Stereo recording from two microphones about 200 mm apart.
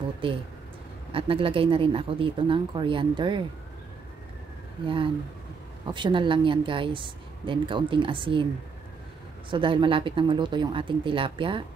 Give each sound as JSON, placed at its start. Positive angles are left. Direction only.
{"t": 0.2, "sound": "speech", "side_deg": -25}
{"t": 4.8, "sound": "speech", "side_deg": -25}
{"t": 9.5, "sound": "speech", "side_deg": -25}